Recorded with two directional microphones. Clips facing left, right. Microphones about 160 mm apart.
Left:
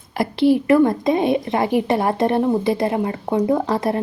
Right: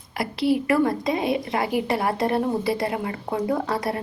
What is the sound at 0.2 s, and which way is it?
Speech, 25° left (ahead or behind).